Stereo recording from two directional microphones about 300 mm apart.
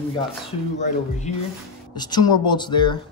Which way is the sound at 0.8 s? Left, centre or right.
Left.